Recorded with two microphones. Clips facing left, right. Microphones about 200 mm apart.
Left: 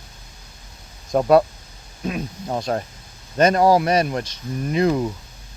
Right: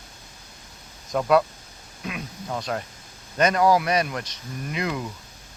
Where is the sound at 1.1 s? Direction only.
35° left (ahead or behind).